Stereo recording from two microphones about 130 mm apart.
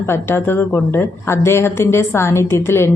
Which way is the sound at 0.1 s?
20° left (ahead or behind).